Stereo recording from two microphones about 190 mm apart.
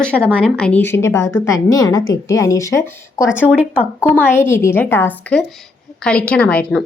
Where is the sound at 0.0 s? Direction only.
5° left (ahead or behind).